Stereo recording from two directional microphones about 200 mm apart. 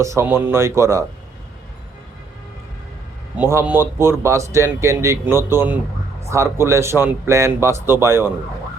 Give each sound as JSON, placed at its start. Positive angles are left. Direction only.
{"t": 0.0, "sound": "speech", "side_deg": -15}
{"t": 3.3, "sound": "speech", "side_deg": -10}